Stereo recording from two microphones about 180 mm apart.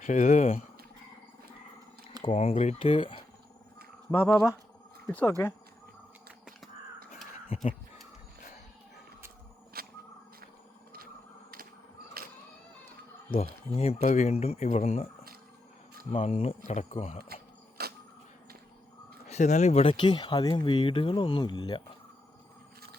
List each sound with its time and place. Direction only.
0.0 s speech: 45° left (ahead or behind)
2.2 s speech: 35° left (ahead or behind)
2.8 s speech: 30° left (ahead or behind)
4.1 s speech: 10° left (ahead or behind)
7.5 s speech: 35° left (ahead or behind)
9.7 s a sound: 55° right (ahead or behind)
13.3 s speech: 35° left (ahead or behind)
16.1 s speech: 35° left (ahead or behind)
17.8 s a sound: 60° right (ahead or behind)
19.3 s speech: 40° left (ahead or behind); by 21.8 s 25° left (ahead or behind)